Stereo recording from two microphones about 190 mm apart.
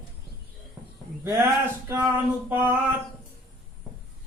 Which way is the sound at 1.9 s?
10° right (ahead or behind).